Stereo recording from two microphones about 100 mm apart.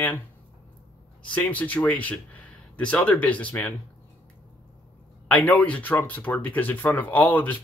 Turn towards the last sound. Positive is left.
turn(degrees=15)  # may be behind; listen again after turning